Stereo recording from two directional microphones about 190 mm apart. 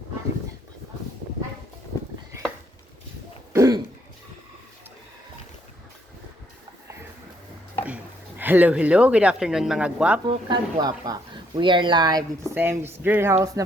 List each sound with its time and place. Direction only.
3.5 s throat clearing: 15° right (ahead or behind)
7.9 s a woman's voice: 10° right (ahead or behind)
10.2 s speech: 25° right (ahead or behind)